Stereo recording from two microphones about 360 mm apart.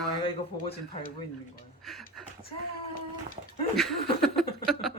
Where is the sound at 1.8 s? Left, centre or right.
Centre.